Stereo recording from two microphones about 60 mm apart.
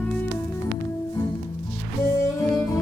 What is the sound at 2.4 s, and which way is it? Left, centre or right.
Music, left.